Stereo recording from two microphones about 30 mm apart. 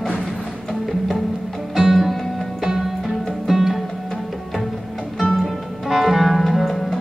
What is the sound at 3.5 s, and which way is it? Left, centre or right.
Music, centre.